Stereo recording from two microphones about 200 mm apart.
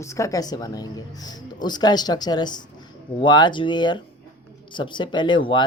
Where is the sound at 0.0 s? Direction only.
15° left (ahead or behind).